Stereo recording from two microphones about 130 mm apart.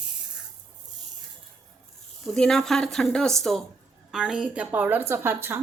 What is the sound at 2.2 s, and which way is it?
A woman's voice, 5° left (ahead or behind).